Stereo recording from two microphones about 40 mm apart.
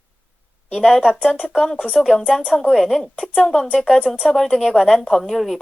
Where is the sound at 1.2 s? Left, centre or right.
Centre.